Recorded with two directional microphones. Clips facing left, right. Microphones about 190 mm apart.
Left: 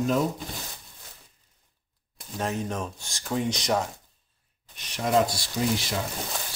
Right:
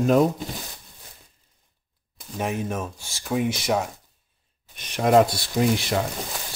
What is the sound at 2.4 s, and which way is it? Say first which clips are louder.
Speech: right 2 dB; 15° right (ahead or behind).